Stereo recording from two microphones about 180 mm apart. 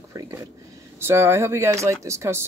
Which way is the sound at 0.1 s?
20° right (ahead or behind).